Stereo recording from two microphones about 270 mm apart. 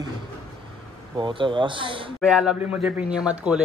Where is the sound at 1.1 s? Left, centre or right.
Centre.